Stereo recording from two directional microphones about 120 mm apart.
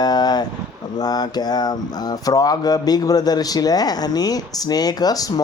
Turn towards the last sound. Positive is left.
turn(degrees=30)  # may be behind; listen again after turning